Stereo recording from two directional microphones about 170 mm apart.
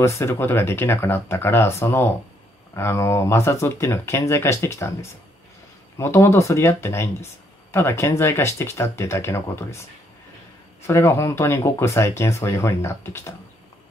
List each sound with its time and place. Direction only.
0.0 s speech: 15° left (ahead or behind)
10.9 s speech: 15° left (ahead or behind)